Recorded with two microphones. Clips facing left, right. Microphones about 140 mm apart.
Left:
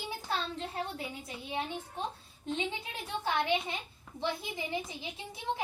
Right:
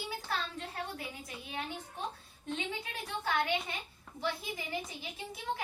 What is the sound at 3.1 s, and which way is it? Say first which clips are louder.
A child's voice: left 2 dB; 25° left (ahead or behind).